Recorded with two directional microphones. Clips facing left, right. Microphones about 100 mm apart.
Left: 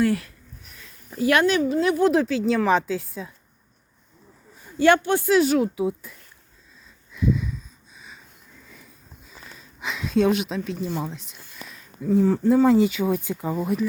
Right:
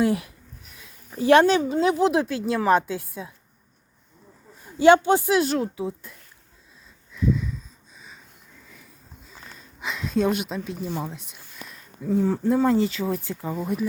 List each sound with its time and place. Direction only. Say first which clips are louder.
0.0 s speech: even; 20° right (ahead or behind)
1.2 s speech: right 3 dB; 30° right (ahead or behind); by 3.3 s 10° right (ahead or behind)
4.8 s speech: right 3 dB; 20° right (ahead or behind)
5.3 s speech: left 3 dB; centre (ahead or behind)
5.6 s speech: left 5 dB; 15° left (ahead or behind)
7.1 s a sound: even; 10° left (ahead or behind)
9.8 s speech: left 3 dB; centre (ahead or behind); by 13.7 s 20° left (ahead or behind)